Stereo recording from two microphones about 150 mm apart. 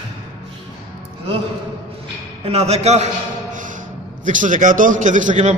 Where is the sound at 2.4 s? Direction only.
45° right (ahead or behind); by 3.7 s 60° right (ahead or behind).